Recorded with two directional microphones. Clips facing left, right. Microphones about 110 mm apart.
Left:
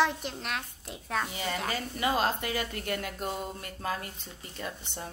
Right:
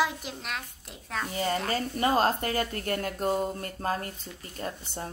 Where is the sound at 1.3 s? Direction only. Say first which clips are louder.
Right 4 dB; 40° right (ahead or behind).